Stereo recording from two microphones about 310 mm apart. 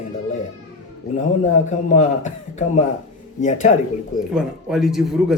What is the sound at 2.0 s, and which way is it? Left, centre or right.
A man's voice, left.